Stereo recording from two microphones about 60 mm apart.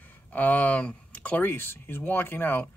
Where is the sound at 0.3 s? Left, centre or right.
Left.